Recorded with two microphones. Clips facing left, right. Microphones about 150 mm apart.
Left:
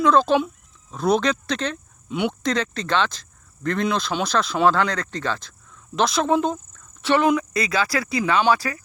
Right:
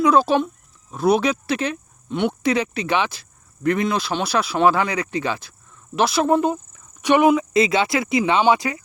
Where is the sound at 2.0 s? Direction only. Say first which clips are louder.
Right 2 dB; 5° left (ahead or behind).